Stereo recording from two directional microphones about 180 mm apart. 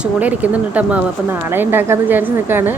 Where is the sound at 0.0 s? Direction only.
10° right (ahead or behind).